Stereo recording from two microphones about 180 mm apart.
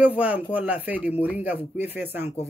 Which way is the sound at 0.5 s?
10° right (ahead or behind).